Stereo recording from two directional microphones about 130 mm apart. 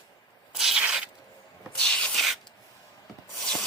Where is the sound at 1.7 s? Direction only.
5° left (ahead or behind).